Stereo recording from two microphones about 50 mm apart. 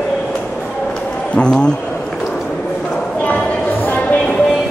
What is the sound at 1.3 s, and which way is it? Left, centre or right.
Speech, centre.